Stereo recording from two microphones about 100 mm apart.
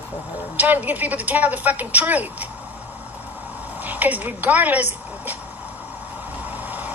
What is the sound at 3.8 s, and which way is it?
A woman's voice, 15° right (ahead or behind).